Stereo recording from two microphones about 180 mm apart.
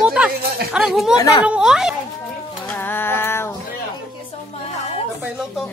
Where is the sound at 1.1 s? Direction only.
20° left (ahead or behind).